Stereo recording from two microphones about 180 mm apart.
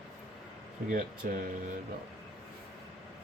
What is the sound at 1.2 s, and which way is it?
Speech, 50° right (ahead or behind).